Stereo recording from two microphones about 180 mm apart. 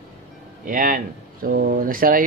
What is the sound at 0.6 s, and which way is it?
Speech, 50° right (ahead or behind).